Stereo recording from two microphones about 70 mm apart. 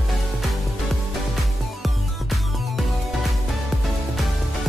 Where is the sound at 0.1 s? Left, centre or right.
Centre.